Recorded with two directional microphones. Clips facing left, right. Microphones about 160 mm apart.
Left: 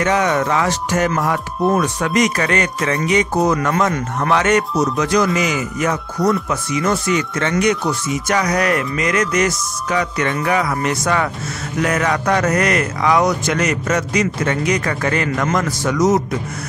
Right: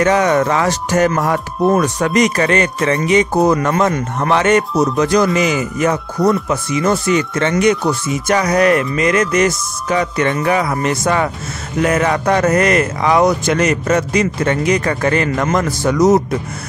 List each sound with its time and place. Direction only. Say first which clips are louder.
0.0 s speech: right 4 dB; 40° right (ahead or behind)